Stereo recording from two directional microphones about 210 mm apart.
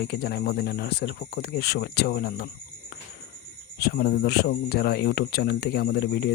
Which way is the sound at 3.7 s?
50° left (ahead or behind).